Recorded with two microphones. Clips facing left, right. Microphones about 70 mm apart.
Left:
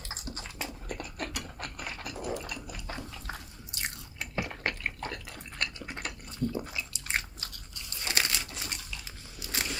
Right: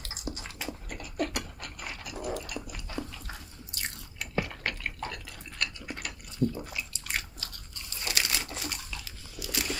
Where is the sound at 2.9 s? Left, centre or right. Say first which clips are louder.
Right 3 dB; left.